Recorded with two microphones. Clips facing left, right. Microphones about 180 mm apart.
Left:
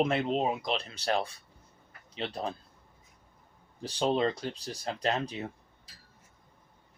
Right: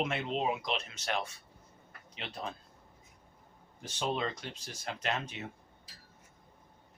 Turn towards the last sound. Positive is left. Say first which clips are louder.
# left 5 dB
turn(degrees=35)  # may be behind; listen again after turning